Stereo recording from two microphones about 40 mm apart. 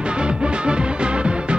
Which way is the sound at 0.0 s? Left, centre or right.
Right.